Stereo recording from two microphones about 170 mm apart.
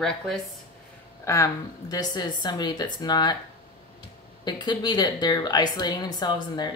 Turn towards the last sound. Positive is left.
turn(degrees=25)  # may be behind; listen again after turning